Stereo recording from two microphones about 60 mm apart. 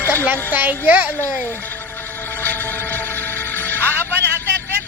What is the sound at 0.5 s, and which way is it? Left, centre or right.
Speech, right.